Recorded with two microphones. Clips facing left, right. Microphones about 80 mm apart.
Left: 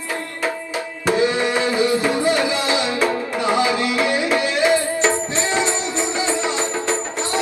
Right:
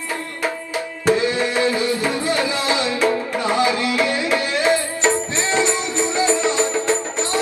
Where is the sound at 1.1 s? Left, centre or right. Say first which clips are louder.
Even; left.